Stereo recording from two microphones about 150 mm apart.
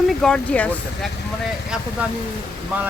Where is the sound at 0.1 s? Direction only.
5° left (ahead or behind).